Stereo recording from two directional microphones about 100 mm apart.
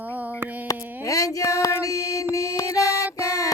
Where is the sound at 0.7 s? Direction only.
35° left (ahead or behind).